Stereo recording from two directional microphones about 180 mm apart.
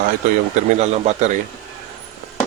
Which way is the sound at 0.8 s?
40° right (ahead or behind).